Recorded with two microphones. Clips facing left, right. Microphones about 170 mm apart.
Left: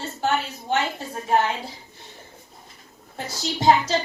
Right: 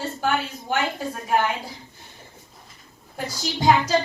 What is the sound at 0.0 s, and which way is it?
Speech, 25° left (ahead or behind).